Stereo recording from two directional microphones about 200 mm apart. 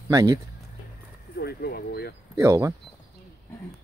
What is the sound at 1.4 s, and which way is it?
Speech, 50° left (ahead or behind).